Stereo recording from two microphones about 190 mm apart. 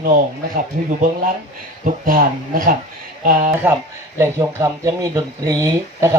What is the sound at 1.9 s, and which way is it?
Speech, 45° right (ahead or behind).